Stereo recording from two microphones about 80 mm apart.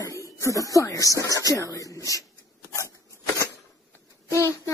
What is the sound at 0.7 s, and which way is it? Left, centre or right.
Speech, left.